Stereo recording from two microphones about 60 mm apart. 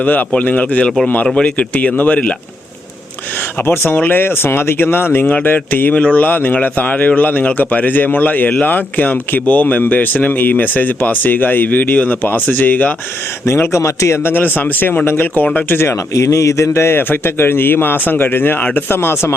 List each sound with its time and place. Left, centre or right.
0.0 s speech: left
1.3 s speech: centre
3.7 s speech: left
13.4 s a man's voice: left
14.3 s speech: left
15.9 s speech: left